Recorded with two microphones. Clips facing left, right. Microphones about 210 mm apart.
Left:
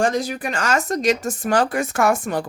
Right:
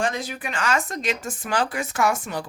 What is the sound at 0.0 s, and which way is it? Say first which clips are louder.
Speech: left 6 dB; 40° left (ahead or behind).